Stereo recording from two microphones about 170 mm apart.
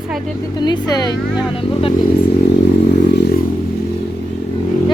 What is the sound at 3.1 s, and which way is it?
Vehicle, 75° left (ahead or behind).